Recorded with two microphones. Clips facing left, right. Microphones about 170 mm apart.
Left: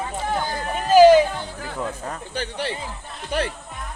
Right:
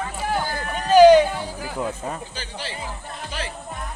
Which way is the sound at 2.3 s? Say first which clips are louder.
Left 6 dB; 60° left (ahead or behind).